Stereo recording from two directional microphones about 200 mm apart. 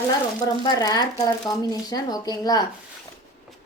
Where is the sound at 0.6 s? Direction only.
20° left (ahead or behind).